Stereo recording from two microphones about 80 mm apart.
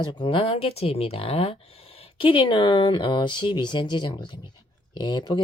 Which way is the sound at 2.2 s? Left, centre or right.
Left.